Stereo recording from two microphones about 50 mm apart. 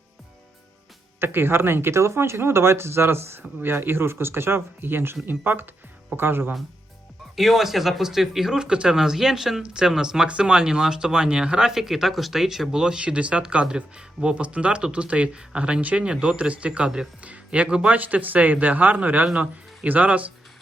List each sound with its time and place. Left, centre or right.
1.2 s speech: right
7.3 s speech: centre
11.7 s speech: centre; by 19.2 s right
19.2 s speech: right